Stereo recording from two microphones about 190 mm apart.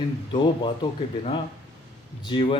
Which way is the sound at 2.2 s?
25° left (ahead or behind).